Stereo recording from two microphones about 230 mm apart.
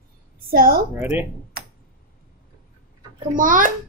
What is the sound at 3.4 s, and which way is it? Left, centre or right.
Speech, right.